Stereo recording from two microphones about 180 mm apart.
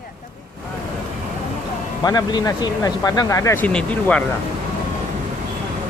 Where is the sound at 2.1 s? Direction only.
20° left (ahead or behind).